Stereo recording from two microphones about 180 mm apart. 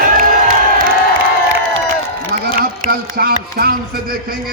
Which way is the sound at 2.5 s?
55° right (ahead or behind).